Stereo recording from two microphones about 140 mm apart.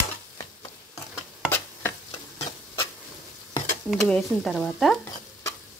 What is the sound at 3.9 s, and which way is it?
Speech, centre (ahead or behind).